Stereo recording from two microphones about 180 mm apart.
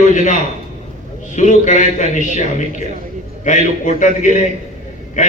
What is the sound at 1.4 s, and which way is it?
A man's voice, 45° left (ahead or behind).